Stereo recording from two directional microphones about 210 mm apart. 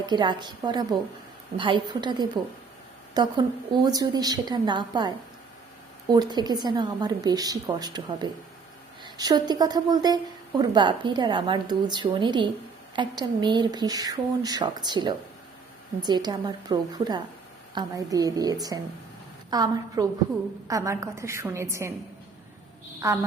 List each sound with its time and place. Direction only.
0.0 s a woman's voice: 20° right (ahead or behind)
23.0 s a woman's voice: 15° right (ahead or behind)